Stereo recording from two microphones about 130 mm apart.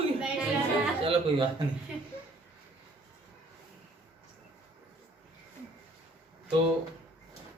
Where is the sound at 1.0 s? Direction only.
45° right (ahead or behind).